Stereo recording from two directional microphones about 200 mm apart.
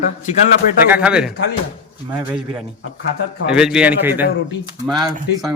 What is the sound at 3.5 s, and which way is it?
A man's voice, 5° right (ahead or behind).